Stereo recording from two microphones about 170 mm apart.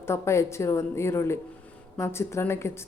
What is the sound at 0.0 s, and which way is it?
A woman's voice, 15° left (ahead or behind).